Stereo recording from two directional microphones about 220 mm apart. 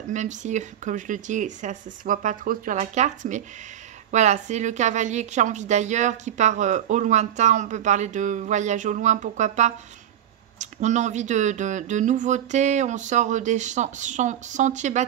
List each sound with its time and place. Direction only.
0.1 s a woman's voice: 35° right (ahead or behind)